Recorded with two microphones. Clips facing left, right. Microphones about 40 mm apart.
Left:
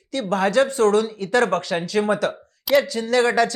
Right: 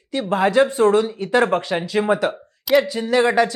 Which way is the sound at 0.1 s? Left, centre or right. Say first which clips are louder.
Right 2 dB; centre.